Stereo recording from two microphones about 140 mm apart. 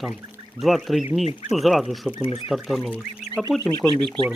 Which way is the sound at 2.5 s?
Centre (ahead or behind).